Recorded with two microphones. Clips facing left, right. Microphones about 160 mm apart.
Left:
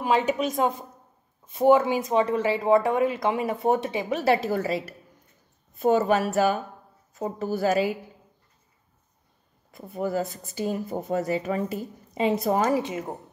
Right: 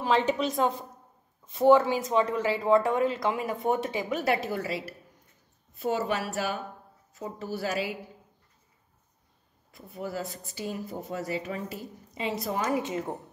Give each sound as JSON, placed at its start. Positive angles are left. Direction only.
{"t": 0.0, "sound": "a woman's voice", "side_deg": 10}
{"t": 1.6, "sound": "a woman's voice", "side_deg": 20}
{"t": 9.7, "sound": "a woman's voice", "side_deg": 50}
{"t": 12.8, "sound": "speech", "side_deg": 20}